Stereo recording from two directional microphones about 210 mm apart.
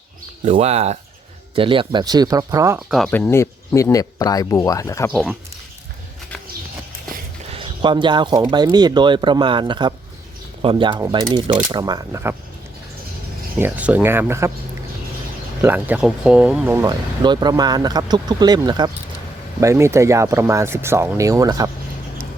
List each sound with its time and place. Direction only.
0.4 s speech: 30° right (ahead or behind)
2.7 s speech: centre (ahead or behind)
5.1 s speech: centre (ahead or behind)
7.5 s speech: 25° right (ahead or behind)
13.6 s speech: 10° right (ahead or behind)
15.6 s speech: 10° right (ahead or behind)